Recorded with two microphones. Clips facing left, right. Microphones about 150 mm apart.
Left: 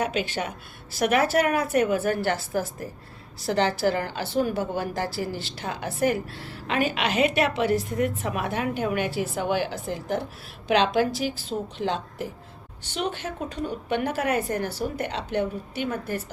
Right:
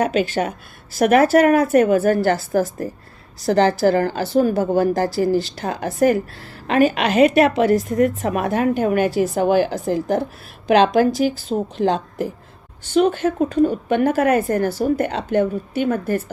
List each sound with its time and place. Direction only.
0.0 s a woman's voice: 50° right (ahead or behind)